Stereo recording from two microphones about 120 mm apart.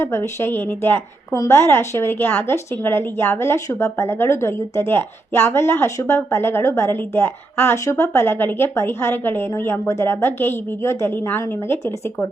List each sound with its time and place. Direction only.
0.0 s a woman's voice: 20° left (ahead or behind)